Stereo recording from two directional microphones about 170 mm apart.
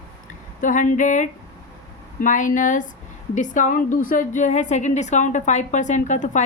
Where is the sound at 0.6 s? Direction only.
50° left (ahead or behind).